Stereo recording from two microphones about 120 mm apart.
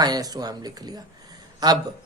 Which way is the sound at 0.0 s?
35° right (ahead or behind).